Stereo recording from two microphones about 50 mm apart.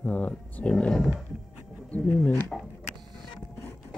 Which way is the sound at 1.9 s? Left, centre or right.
Left.